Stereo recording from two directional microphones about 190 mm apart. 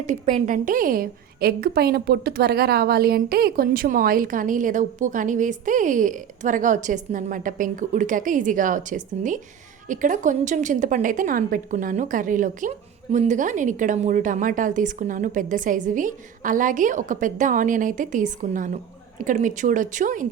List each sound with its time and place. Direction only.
0.0 s a woman's voice: 40° right (ahead or behind)